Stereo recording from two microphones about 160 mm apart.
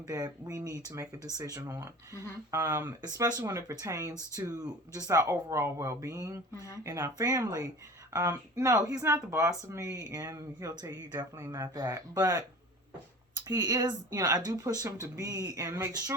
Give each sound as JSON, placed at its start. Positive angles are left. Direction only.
{"t": 0.1, "sound": "speech", "side_deg": -20}
{"t": 13.5, "sound": "speech", "side_deg": -25}